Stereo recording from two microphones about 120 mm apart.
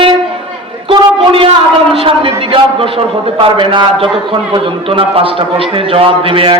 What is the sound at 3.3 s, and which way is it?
A man's voice, 45° right (ahead or behind).